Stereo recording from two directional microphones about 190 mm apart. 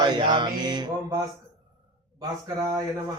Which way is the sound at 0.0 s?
25° right (ahead or behind).